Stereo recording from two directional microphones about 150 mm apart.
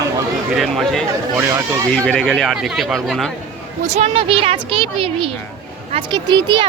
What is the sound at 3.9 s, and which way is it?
A woman's voice, 40° right (ahead or behind).